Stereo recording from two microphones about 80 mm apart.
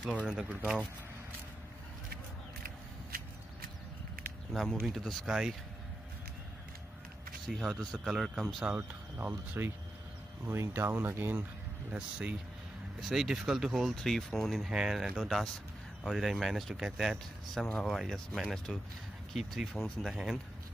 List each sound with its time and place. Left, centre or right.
0.2 s speech: centre
4.5 s speech: centre
7.4 s speech: centre
8.7 s speech: right
10.4 s speech: right
11.9 s speech: centre
13.1 s speech: centre